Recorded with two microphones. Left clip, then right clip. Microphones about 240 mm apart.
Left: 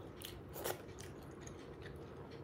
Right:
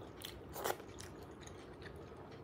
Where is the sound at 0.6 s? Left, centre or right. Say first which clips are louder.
Right 3 dB; centre.